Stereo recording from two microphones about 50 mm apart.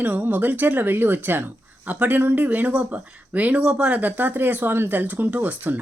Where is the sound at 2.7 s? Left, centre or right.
Right.